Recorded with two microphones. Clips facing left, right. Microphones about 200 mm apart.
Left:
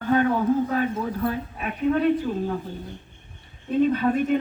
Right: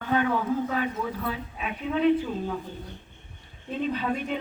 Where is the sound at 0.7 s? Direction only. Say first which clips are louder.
Left 4 dB; 50° left (ahead or behind).